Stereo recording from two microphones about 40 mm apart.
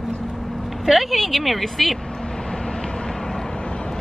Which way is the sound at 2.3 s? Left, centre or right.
Centre.